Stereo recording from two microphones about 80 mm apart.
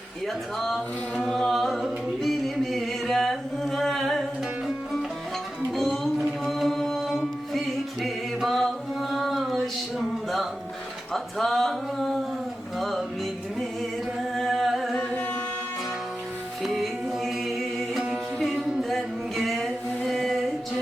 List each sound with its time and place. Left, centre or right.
1.2 s music: centre
5.7 s music: centre
8.0 s chant: centre
11.1 s a sound: centre
12.8 s music: centre
14.2 s singing: centre
16.6 s music: centre
20.1 s a sound: centre